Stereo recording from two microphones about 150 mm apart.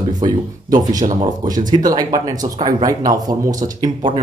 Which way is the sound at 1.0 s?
55° right (ahead or behind).